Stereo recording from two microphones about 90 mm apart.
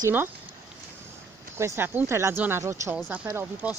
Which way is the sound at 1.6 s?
25° right (ahead or behind).